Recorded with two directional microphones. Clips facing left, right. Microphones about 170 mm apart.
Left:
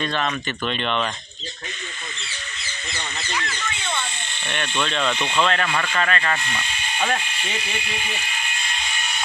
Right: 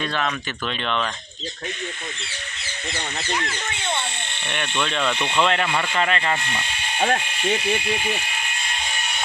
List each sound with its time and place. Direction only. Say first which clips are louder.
0.0 s speech: left 1 dB; 5° right (ahead or behind)
3.3 s speech: left 1 dB; 25° right (ahead or behind)
4.8 s speech: even; 5° right (ahead or behind)
7.0 s speech: right 3 dB; 55° right (ahead or behind)